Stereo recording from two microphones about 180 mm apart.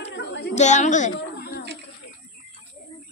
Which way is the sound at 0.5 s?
40° left (ahead or behind).